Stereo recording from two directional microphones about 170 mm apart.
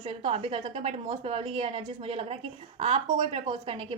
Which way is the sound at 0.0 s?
30° right (ahead or behind).